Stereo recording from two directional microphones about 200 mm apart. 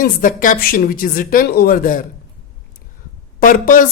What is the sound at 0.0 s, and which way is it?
A woman's voice, 40° left (ahead or behind).